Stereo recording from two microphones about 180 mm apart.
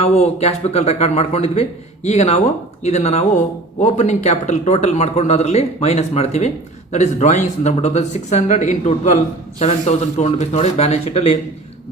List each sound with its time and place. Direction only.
0.0 s speech: 35° left (ahead or behind)